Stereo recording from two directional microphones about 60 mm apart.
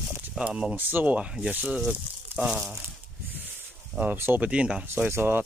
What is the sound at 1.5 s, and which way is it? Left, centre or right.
Speech, right.